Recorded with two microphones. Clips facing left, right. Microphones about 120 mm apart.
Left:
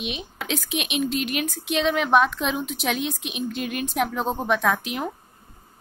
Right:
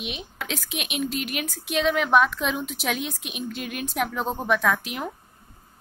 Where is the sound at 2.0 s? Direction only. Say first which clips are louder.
Left 1 dB; 25° left (ahead or behind).